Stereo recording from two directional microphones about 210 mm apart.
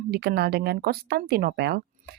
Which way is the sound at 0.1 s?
50° right (ahead or behind).